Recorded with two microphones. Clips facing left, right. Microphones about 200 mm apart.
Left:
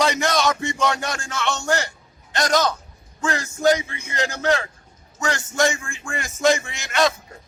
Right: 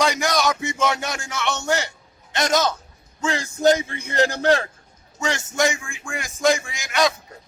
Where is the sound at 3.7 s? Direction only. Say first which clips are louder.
Right 1 dB; 55° right (ahead or behind).